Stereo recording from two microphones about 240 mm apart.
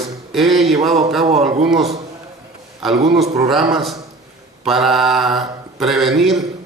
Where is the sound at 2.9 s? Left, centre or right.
Right.